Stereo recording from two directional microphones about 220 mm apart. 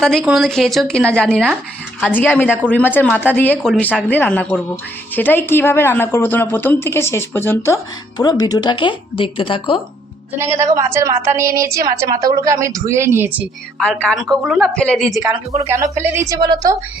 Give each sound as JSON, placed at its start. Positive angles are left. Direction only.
{"t": 0.0, "sound": "a woman's voice", "side_deg": 0}
{"t": 10.4, "sound": "a woman's voice", "side_deg": -15}
{"t": 13.7, "sound": "a woman's voice", "side_deg": 5}
{"t": 15.2, "sound": "a woman's voice", "side_deg": -15}